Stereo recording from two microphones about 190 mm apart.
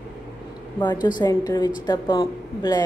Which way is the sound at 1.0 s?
20° left (ahead or behind).